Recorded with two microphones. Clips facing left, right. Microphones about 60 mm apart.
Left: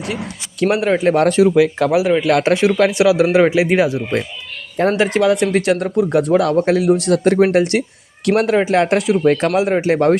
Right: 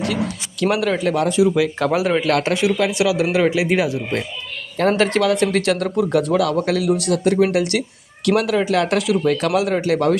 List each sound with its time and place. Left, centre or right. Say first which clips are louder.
0.6 s speech: left 4 dB; left
1.1 s speech: left 4 dB; left
1.5 s speech: left 5 dB; left
1.9 s speech: left 3 dB; centre
2.2 s speech: left 4 dB; left